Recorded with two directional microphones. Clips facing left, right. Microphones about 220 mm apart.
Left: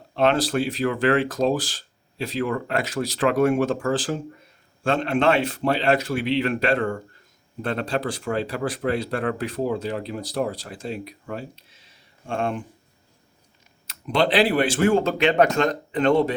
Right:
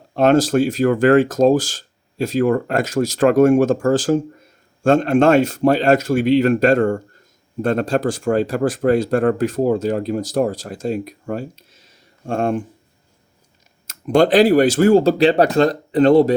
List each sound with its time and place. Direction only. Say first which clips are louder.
0.2 s speech: right 7 dB; 45° right (ahead or behind)
13.8 s speech: right 8 dB; 45° right (ahead or behind)